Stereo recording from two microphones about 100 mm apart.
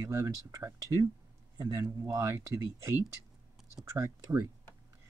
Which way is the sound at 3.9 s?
30° right (ahead or behind).